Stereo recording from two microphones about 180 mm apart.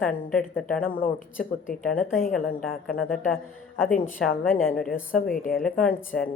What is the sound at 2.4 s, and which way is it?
Speech, 55° left (ahead or behind).